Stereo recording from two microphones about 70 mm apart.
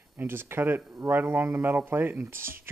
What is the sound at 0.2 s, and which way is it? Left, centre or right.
Speech, right.